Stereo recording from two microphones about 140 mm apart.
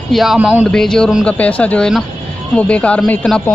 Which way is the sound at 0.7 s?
5° left (ahead or behind).